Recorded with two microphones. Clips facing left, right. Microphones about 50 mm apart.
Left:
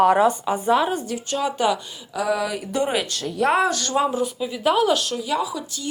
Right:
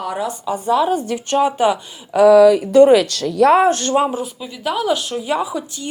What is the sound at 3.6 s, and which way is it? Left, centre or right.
Speech, right.